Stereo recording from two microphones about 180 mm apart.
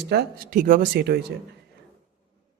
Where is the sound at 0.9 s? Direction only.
65° right (ahead or behind).